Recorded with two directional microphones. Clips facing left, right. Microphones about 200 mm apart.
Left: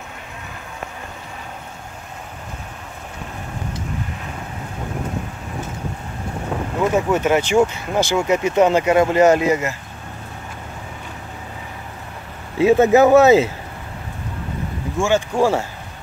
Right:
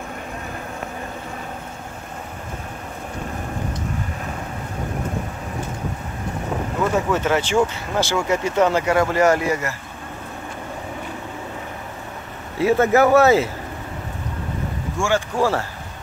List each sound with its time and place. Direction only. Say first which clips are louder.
7.1 s speech: left 3 dB; 15° left (ahead or behind)
12.5 s speech: left 4 dB; 20° left (ahead or behind)
15.0 s speech: left 3 dB; 15° left (ahead or behind)